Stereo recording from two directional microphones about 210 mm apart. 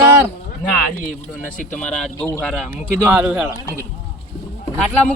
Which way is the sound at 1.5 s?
35° left (ahead or behind).